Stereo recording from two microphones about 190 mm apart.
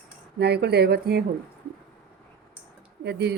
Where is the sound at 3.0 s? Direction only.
60° right (ahead or behind).